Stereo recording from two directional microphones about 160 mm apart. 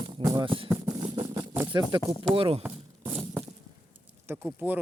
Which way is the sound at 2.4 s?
35° right (ahead or behind).